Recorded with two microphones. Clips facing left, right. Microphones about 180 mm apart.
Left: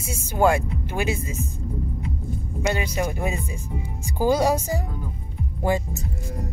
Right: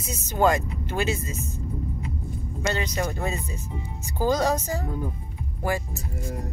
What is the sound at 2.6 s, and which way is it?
Speech, 10° left (ahead or behind).